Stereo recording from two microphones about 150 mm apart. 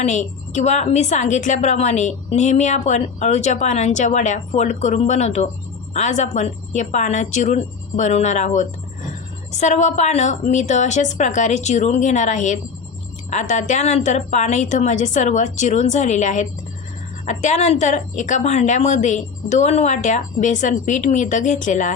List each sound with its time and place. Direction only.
0.0 s a woman's voice: 50° left (ahead or behind)